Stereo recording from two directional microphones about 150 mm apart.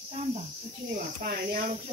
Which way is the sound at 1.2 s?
75° right (ahead or behind).